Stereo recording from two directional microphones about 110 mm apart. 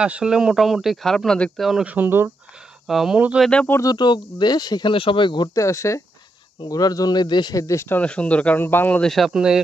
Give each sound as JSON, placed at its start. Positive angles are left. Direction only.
{"t": 0.0, "sound": "speech", "side_deg": -10}
{"t": 1.7, "sound": "speech", "side_deg": -5}
{"t": 2.0, "sound": "speech", "side_deg": -20}
{"t": 2.9, "sound": "speech", "side_deg": 0}
{"t": 3.4, "sound": "speech", "side_deg": 10}
{"t": 3.7, "sound": "speech", "side_deg": 35}
{"t": 5.6, "sound": "speech", "side_deg": 30}
{"t": 8.0, "sound": "speech", "side_deg": 10}
{"t": 9.1, "sound": "speech", "side_deg": -5}